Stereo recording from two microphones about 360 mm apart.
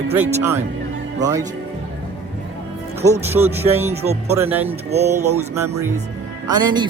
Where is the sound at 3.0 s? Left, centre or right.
Centre.